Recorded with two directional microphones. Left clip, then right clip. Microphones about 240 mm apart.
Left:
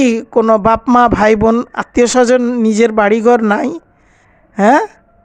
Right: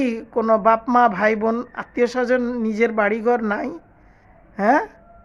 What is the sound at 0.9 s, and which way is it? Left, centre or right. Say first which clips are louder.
Speech: left 7 dB; left.